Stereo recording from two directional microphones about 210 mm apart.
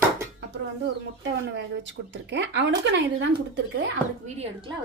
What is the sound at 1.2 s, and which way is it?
Speech, 55° right (ahead or behind).